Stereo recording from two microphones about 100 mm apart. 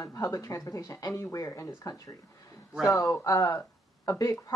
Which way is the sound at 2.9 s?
30° left (ahead or behind).